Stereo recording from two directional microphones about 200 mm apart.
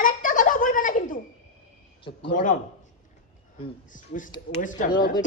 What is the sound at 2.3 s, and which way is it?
Speech, 40° left (ahead or behind).